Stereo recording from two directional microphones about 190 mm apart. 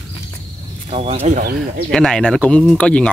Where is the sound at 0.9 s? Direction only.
35° right (ahead or behind).